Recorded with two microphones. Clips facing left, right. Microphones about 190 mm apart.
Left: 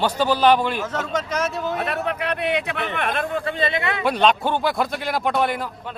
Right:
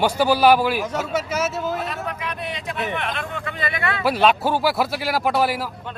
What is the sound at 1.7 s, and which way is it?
Speech, 65° left (ahead or behind).